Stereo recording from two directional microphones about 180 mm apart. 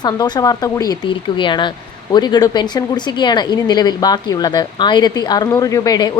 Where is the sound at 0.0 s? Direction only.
20° left (ahead or behind).